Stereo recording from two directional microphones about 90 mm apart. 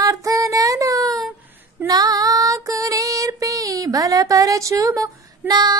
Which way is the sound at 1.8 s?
45° right (ahead or behind).